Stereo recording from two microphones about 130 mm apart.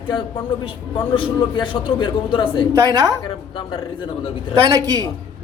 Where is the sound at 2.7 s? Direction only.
30° right (ahead or behind).